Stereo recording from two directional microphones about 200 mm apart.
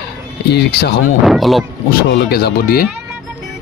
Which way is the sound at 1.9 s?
55° left (ahead or behind).